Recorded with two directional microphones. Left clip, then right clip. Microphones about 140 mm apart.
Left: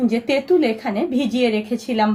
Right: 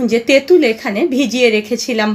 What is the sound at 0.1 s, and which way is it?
A woman's voice, 45° right (ahead or behind).